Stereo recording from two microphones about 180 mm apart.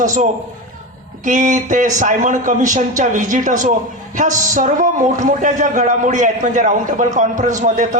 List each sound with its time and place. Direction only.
0.0 s a man's voice: 45° right (ahead or behind)